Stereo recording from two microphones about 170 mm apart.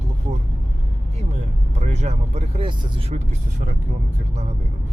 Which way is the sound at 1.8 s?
40° right (ahead or behind).